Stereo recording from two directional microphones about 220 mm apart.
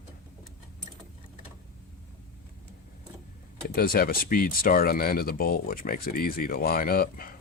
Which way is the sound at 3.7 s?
45° left (ahead or behind).